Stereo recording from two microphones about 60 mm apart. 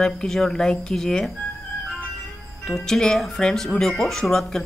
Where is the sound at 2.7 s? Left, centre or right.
Centre.